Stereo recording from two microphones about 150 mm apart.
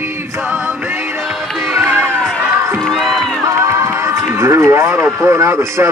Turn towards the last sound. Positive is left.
turn(degrees=-20)  # may be behind; listen again after turning